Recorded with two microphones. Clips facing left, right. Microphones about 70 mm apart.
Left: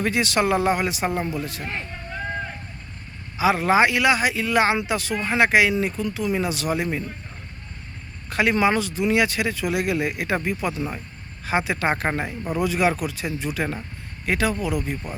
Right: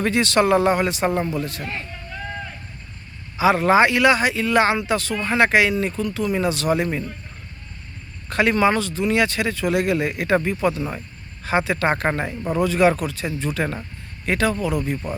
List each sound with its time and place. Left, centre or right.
0.0 s speech: centre
1.6 s a sound: left
3.3 s speech: centre
8.3 s speech: centre